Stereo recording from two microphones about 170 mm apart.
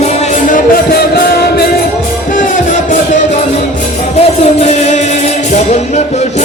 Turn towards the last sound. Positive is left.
turn(degrees=40)  # may be behind; listen again after turning